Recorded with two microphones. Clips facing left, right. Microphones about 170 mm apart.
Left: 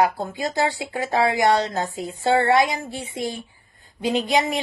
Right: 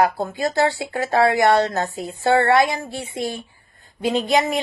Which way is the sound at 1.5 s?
45° right (ahead or behind).